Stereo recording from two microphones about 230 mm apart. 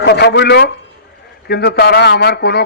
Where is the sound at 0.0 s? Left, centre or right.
Left.